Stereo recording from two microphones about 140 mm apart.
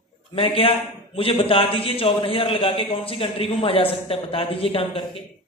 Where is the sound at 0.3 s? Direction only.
40° left (ahead or behind).